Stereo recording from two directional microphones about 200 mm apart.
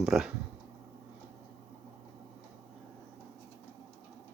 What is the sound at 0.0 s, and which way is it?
Speech, centre (ahead or behind).